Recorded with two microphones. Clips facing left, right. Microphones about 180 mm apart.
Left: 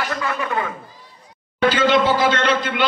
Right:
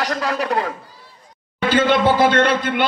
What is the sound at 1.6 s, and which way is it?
A man's voice, 55° right (ahead or behind).